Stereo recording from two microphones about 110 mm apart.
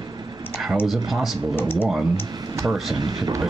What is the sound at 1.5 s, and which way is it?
Speech, 20° left (ahead or behind).